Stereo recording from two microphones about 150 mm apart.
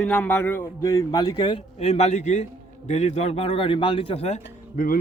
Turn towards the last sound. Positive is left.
turn(degrees=50)  # may be behind; listen again after turning